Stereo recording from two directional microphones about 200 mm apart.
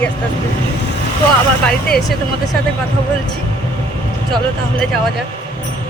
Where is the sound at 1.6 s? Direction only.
5° left (ahead or behind).